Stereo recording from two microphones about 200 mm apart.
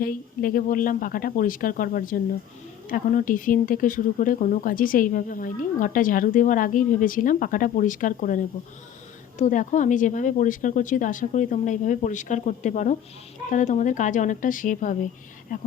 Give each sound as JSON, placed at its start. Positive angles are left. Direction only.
{"t": 0.0, "sound": "speech", "side_deg": 45}